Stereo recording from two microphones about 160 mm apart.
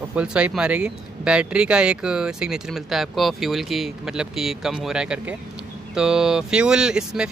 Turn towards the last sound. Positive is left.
turn(degrees=-5)  # may be behind; listen again after turning